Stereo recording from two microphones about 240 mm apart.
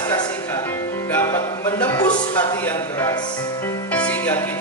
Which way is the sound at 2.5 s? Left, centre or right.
Centre.